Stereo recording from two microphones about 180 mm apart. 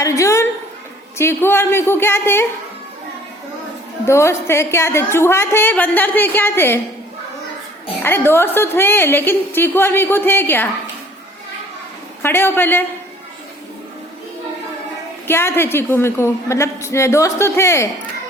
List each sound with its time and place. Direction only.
0.0 s a woman's voice: 15° left (ahead or behind)
4.0 s a woman's voice: 15° left (ahead or behind)
8.0 s a woman's voice: 10° left (ahead or behind)
12.2 s a woman's voice: 10° left (ahead or behind)
15.3 s a woman's voice: 15° left (ahead or behind)